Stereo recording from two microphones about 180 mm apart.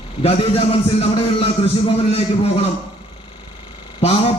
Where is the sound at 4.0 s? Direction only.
35° left (ahead or behind).